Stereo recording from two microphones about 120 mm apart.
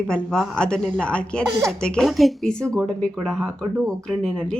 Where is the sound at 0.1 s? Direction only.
5° left (ahead or behind).